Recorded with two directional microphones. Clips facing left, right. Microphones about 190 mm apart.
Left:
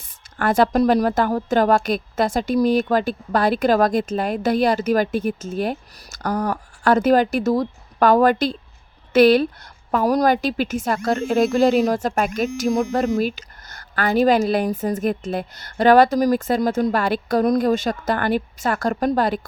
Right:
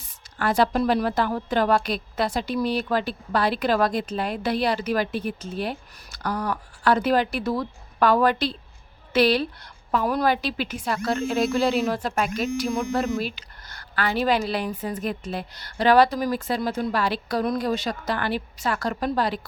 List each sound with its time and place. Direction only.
0.0 s a woman's voice: 50° left (ahead or behind)